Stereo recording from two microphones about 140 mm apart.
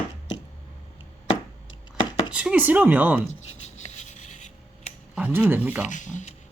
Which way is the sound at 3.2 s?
55° left (ahead or behind).